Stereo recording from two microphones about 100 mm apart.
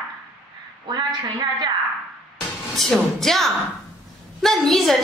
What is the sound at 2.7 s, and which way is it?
Speech, 5° left (ahead or behind).